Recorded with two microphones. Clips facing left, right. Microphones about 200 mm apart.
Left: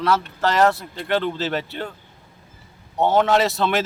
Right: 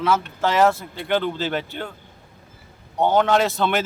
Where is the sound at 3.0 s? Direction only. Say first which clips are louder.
Even; centre (ahead or behind).